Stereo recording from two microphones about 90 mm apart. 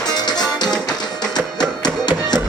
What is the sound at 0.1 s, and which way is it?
Music, 50° left (ahead or behind).